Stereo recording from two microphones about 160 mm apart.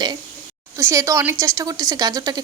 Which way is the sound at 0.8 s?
15° right (ahead or behind).